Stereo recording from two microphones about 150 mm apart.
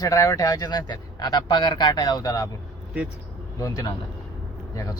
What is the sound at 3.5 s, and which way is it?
Speech, 20° left (ahead or behind).